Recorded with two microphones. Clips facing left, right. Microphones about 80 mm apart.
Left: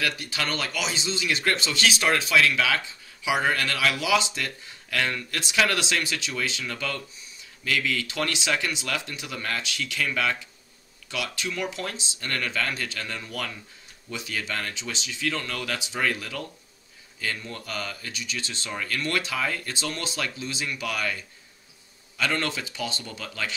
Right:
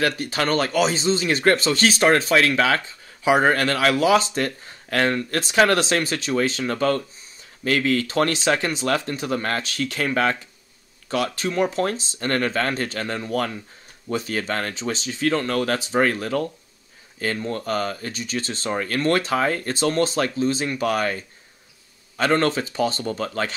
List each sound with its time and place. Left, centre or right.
0.0 s speech: right